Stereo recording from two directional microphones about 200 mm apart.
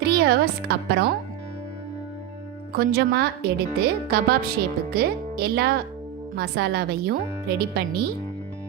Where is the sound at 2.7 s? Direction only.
50° right (ahead or behind).